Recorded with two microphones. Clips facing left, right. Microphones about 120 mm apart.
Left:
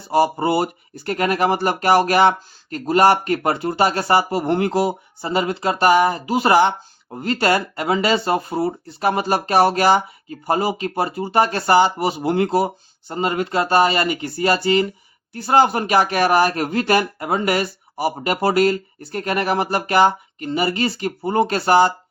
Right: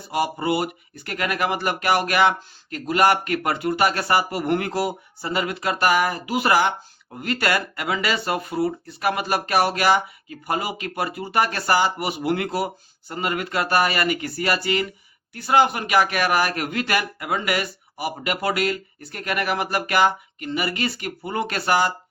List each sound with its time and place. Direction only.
0.1 s speech: 30° left (ahead or behind)